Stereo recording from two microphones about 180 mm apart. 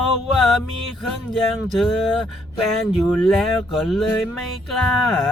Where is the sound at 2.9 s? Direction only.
Centre (ahead or behind).